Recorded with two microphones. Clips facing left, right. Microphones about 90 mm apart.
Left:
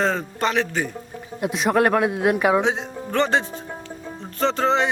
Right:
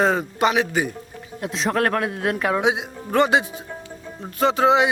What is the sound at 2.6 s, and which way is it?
A man's voice, 10° right (ahead or behind).